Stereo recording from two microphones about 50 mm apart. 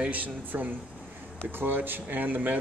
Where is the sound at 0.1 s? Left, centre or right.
Right.